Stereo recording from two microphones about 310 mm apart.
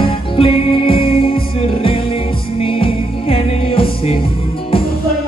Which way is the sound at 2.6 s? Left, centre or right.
Centre.